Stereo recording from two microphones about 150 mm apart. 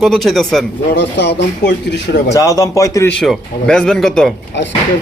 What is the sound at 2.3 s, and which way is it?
Speech, 20° left (ahead or behind).